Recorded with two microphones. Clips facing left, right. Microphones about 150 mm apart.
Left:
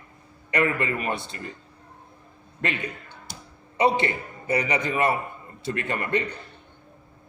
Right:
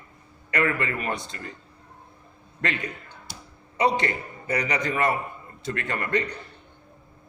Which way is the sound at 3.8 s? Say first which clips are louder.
Left 1 dB; 25° left (ahead or behind).